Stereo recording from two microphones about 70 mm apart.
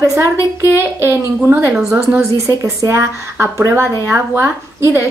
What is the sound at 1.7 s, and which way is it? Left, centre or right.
Speech, centre.